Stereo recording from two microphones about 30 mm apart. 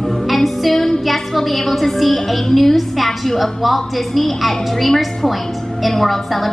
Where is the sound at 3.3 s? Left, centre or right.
Centre.